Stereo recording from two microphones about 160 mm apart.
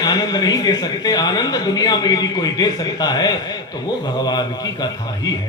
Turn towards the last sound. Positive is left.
turn(degrees=25)  # may be behind; listen again after turning